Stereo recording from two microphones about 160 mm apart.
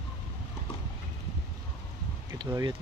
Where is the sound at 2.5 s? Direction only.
20° right (ahead or behind).